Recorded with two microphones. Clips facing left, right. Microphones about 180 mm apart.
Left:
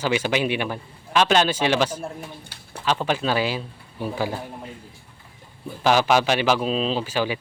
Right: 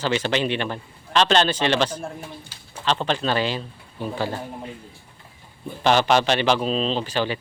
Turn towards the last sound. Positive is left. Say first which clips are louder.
# even
turn(degrees=10)  # may be behind; listen again after turning